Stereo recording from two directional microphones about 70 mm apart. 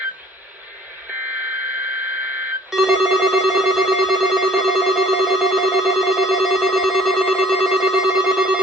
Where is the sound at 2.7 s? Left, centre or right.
Centre.